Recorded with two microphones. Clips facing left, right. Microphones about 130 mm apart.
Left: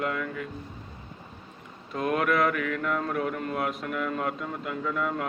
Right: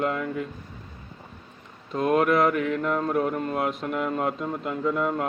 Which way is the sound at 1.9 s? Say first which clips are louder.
Right 4 dB; 30° right (ahead or behind).